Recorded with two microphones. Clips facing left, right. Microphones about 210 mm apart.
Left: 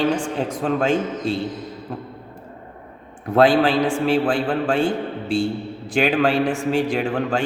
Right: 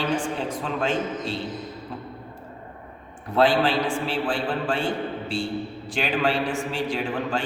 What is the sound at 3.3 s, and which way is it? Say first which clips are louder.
A man's voice: left 5 dB; 45° left (ahead or behind).